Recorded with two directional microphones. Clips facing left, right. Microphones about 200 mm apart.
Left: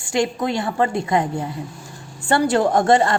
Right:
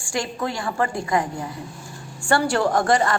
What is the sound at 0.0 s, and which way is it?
A woman's voice, 20° left (ahead or behind).